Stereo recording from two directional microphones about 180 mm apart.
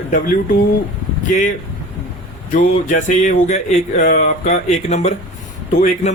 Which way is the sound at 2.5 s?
45° left (ahead or behind).